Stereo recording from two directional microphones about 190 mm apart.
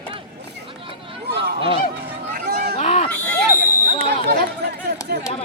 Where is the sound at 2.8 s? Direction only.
30° left (ahead or behind).